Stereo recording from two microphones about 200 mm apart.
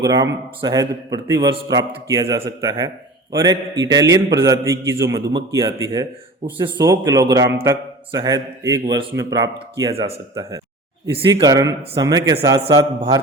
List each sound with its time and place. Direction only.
0.0 s speech: 20° right (ahead or behind)